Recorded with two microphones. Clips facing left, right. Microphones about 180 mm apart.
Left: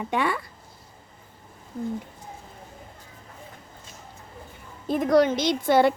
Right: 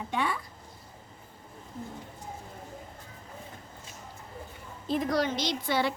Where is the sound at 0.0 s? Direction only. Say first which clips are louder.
Left 5 dB; 70° left (ahead or behind).